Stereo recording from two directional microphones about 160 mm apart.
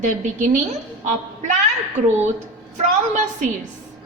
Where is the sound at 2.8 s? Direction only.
50° right (ahead or behind).